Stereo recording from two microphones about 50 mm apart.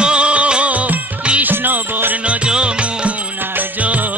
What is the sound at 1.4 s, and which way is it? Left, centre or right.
Music, right.